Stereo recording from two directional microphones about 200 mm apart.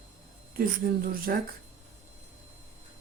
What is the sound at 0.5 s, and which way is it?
Speech, 45° right (ahead or behind).